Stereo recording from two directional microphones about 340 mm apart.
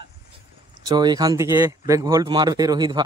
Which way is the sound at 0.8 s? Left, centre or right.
Centre.